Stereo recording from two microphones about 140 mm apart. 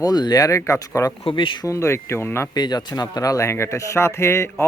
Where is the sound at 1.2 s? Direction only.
40° left (ahead or behind).